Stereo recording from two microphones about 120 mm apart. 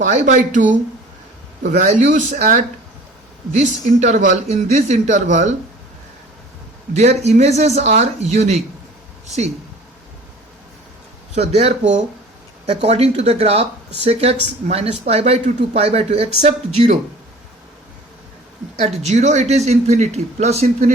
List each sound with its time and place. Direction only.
0.0 s a man's voice: 90° right
3.5 s a man's voice: 80° right
6.9 s speech: 70° right (ahead or behind)
11.3 s speech: 60° right (ahead or behind)
18.8 s speech: 70° right (ahead or behind)